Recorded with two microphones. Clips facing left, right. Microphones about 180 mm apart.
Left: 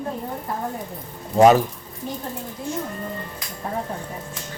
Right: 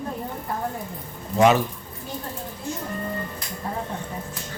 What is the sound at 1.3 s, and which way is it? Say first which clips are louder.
Speech: left 4 dB; 40° left (ahead or behind).